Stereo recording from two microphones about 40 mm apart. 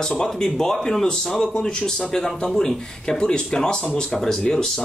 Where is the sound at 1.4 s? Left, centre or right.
Left.